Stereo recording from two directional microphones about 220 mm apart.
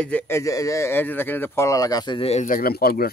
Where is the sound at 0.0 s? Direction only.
10° left (ahead or behind).